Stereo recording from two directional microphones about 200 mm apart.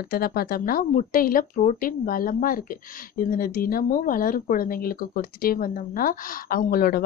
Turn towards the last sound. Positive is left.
turn(degrees=45)  # may be behind; listen again after turning